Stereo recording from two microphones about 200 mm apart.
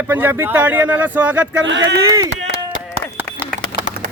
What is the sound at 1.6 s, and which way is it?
Speech, 65° right (ahead or behind).